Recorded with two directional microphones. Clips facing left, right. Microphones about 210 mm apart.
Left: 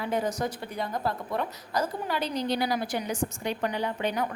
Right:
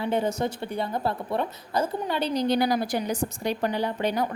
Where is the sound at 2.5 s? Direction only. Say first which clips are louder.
Right 4 dB; 45° right (ahead or behind).